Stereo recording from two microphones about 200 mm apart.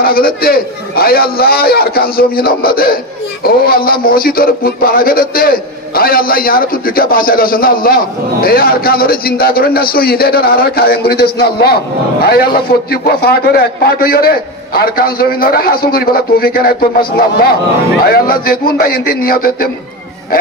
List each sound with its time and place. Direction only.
0.0 s a man's voice: 50° left (ahead or behind)
18.0 s a man's voice: 50° left (ahead or behind)